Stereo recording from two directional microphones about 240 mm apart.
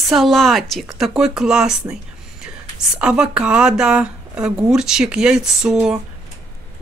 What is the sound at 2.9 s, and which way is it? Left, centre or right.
Speech, centre.